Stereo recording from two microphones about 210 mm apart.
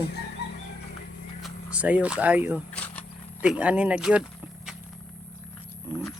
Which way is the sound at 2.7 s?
5° left (ahead or behind).